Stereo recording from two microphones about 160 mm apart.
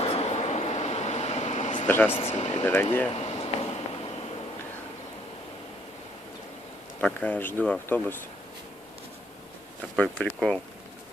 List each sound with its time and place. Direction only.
0.0 s vehicle: 40° left (ahead or behind)
1.9 s speech: 15° left (ahead or behind)
2.1 s speech: 40° left (ahead or behind)
2.6 s speech: 15° left (ahead or behind)
3.1 s a sound: 40° left (ahead or behind)
7.0 s speech: 10° left (ahead or behind)
10.2 s speech: 10° left (ahead or behind)